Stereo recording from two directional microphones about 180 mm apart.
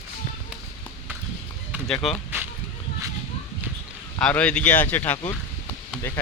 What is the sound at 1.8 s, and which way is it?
Speech, 5° left (ahead or behind).